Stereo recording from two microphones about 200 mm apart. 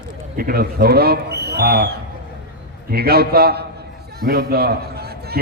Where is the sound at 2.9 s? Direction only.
50° right (ahead or behind).